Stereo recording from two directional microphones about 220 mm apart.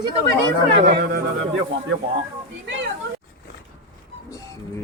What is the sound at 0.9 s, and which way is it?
Speech, 45° right (ahead or behind).